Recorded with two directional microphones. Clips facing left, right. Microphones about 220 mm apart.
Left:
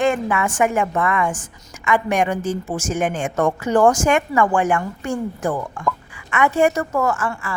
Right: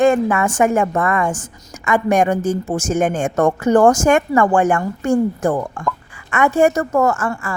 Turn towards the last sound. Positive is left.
turn(degrees=-45)  # may be behind; listen again after turning